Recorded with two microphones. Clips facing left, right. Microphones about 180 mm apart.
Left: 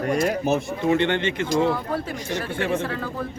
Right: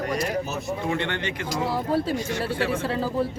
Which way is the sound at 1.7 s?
30° right (ahead or behind).